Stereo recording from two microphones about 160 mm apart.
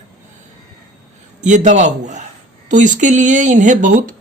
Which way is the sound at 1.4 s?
50° right (ahead or behind).